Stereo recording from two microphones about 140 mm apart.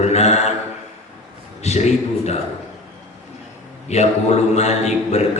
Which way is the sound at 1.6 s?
50° left (ahead or behind).